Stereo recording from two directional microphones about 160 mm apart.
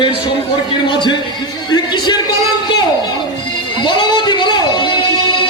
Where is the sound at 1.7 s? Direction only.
25° left (ahead or behind).